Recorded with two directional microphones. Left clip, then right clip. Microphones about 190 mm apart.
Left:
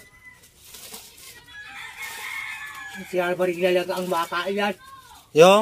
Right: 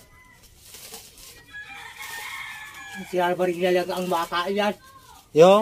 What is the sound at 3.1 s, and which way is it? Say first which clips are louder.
Speech: even; 5° right (ahead or behind).